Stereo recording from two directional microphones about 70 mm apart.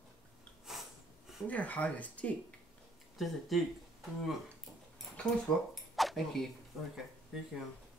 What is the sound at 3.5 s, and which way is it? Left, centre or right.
Speech, centre.